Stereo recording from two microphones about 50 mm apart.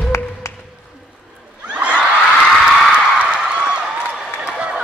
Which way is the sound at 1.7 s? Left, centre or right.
Right.